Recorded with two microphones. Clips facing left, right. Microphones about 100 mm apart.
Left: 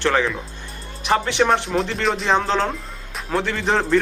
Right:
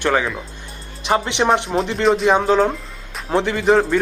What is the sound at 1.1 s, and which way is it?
Speech, 20° right (ahead or behind).